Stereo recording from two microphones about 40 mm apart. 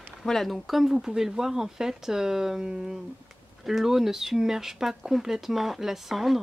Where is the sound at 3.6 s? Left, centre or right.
Centre.